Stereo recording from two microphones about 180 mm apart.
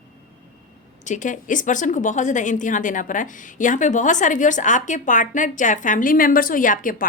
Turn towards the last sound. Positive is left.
turn(degrees=50)  # may be behind; listen again after turning